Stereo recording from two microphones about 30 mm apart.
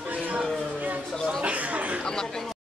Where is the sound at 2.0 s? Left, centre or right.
Left.